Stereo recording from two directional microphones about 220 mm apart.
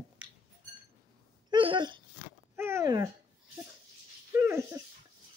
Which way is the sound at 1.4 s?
20° right (ahead or behind).